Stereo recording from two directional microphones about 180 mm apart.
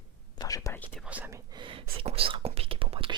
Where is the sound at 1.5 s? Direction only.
25° right (ahead or behind).